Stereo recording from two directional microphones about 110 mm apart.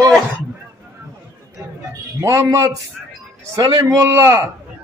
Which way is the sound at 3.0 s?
5° right (ahead or behind).